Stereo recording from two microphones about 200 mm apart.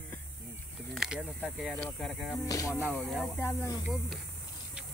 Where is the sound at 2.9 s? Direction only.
5° left (ahead or behind).